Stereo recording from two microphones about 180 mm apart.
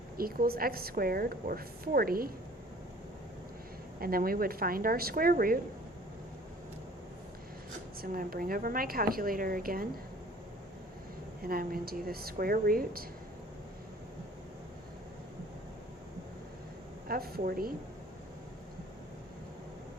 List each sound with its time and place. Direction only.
0.2 s a woman's voice: 55° right (ahead or behind)
4.0 s a woman's voice: 55° right (ahead or behind)
8.0 s a woman's voice: 55° right (ahead or behind)
11.4 s a woman's voice: 55° right (ahead or behind)
17.1 s a woman's voice: 55° right (ahead or behind)